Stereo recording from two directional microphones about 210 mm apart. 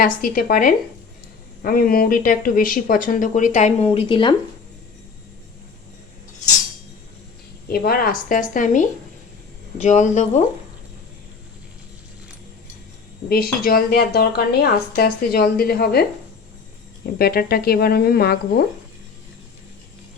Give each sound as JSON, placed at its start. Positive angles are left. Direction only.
{"t": 0.0, "sound": "speech", "side_deg": 40}
{"t": 7.7, "sound": "speech", "side_deg": 45}
{"t": 13.2, "sound": "a woman's voice", "side_deg": 45}
{"t": 17.2, "sound": "a woman's voice", "side_deg": 45}